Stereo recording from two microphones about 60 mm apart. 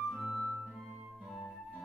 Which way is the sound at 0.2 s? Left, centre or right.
Centre.